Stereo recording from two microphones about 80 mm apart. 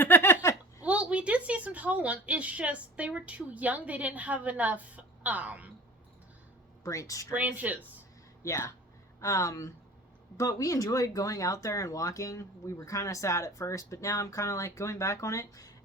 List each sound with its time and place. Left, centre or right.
0.0 s giggle: left
0.9 s a woman's voice: centre
6.8 s speech: left
7.3 s speech: right
8.4 s speech: left